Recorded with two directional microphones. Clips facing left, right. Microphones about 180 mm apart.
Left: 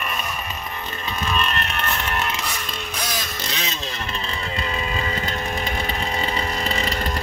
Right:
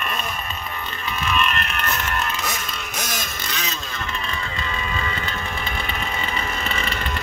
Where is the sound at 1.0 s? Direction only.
35° left (ahead or behind).